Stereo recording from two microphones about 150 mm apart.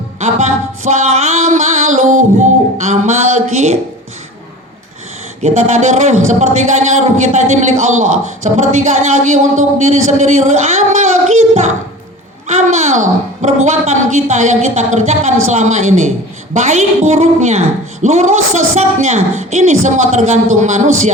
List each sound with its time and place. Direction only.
0.2 s music: 50° right (ahead or behind)
2.7 s a man's voice: 50° right (ahead or behind)
5.4 s a man's voice: 50° right (ahead or behind)